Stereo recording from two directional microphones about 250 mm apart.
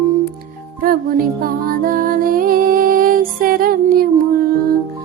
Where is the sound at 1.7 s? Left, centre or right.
Right.